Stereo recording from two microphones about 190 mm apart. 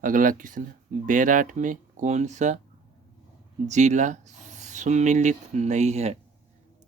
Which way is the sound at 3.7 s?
40° right (ahead or behind).